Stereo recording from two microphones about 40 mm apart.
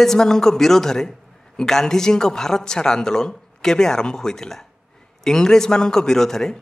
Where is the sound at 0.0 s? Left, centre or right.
Centre.